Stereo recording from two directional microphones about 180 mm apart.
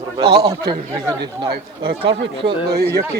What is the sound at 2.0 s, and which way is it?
Speech, 75° right (ahead or behind).